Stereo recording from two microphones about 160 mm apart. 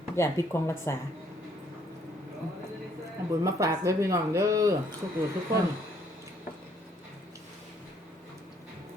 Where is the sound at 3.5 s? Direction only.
20° right (ahead or behind).